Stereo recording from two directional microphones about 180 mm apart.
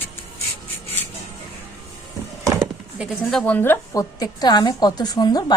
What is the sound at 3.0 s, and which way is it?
A woman's voice, 5° left (ahead or behind).